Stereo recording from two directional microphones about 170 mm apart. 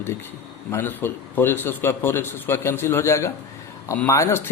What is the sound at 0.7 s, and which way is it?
A man's voice, 10° left (ahead or behind).